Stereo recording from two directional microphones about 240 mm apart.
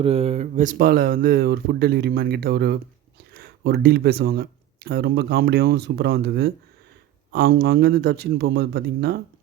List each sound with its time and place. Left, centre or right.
0.0 s speech: right